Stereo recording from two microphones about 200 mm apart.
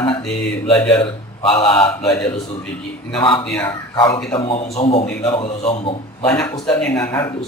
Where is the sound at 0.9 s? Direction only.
30° left (ahead or behind).